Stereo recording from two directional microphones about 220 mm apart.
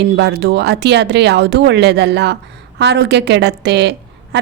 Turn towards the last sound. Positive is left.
turn(degrees=-50)  # may be behind; listen again after turning